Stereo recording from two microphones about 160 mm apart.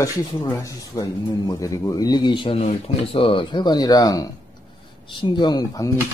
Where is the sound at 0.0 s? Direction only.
20° left (ahead or behind).